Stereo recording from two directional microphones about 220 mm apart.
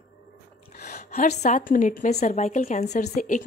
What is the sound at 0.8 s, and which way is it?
A woman's voice, 35° left (ahead or behind).